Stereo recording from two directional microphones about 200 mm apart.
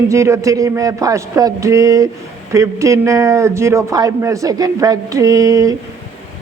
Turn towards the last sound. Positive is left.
turn(degrees=-15)  # may be behind; listen again after turning